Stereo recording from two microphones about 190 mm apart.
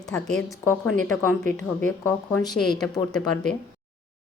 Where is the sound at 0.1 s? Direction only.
5° left (ahead or behind).